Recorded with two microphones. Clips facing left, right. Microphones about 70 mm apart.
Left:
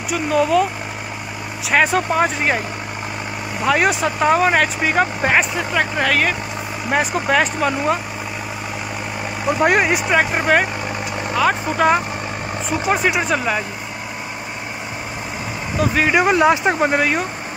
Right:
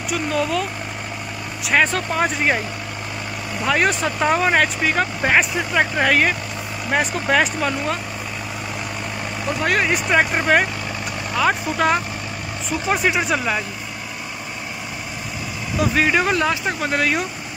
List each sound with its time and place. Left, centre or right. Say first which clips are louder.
0.1 s speech: left 5 dB; centre
1.7 s speech: left 2 dB; centre
3.6 s speech: left 2 dB; centre
5.4 s speech: even; centre
6.9 s speech: left 2 dB; centre
9.6 s speech: left 4 dB; centre
9.9 s speech: left 1 dB; centre
11.7 s speech: left 6 dB; centre
13.2 s speech: left 2 dB; centre
15.8 s speech: left 1 dB; centre
16.2 s speech: left 5 dB; centre
17.0 s speech: left 2 dB; centre